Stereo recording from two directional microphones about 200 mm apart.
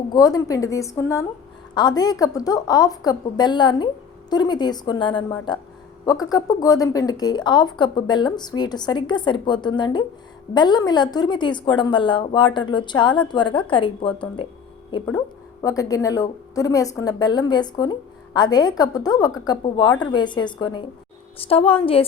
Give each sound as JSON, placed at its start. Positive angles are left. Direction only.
{"t": 0.1, "sound": "a woman's voice", "side_deg": 20}